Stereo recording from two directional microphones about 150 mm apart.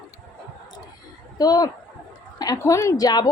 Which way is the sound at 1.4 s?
25° left (ahead or behind).